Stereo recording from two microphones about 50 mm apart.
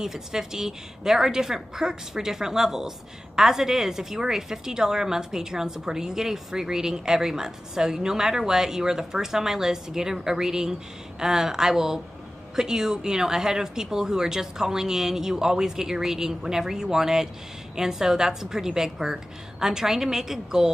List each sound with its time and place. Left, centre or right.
0.0 s a woman's voice: centre